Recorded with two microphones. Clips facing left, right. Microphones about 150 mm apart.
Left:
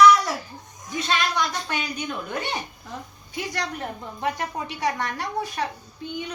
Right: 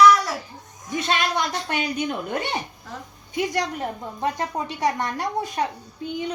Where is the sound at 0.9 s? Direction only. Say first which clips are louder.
Right 2 dB; 25° right (ahead or behind).